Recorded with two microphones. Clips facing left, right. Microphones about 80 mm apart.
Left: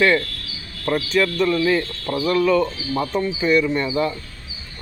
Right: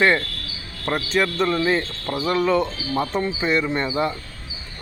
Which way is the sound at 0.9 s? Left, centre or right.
Right.